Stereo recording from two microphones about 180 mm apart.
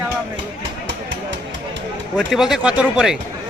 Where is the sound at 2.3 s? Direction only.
Centre (ahead or behind).